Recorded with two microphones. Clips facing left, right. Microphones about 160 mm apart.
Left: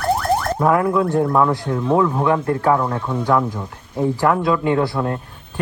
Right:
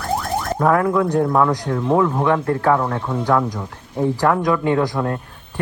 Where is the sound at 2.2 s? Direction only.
15° left (ahead or behind).